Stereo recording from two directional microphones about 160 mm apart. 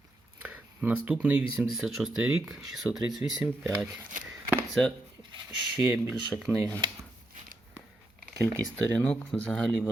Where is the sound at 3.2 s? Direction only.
15° right (ahead or behind).